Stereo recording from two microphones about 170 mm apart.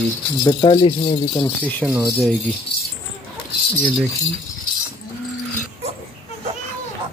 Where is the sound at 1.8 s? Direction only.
5° right (ahead or behind).